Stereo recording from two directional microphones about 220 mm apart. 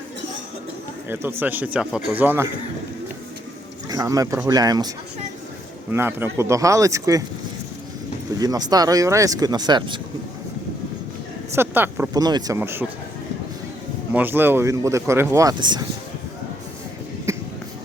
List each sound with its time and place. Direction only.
1.0 s speech: 10° right (ahead or behind)
3.8 s a man's voice: 15° right (ahead or behind)
5.9 s speech: 10° right (ahead or behind)
8.4 s speech: 15° right (ahead or behind)
11.5 s speech: 10° right (ahead or behind)
14.1 s speech: 10° right (ahead or behind)
17.3 s basketball bounce: 15° right (ahead or behind)